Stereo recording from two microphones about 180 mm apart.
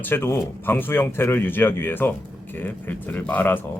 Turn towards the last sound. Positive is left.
turn(degrees=10)  # may be behind; listen again after turning